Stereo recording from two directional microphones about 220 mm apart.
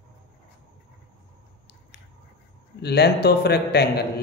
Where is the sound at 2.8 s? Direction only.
50° left (ahead or behind).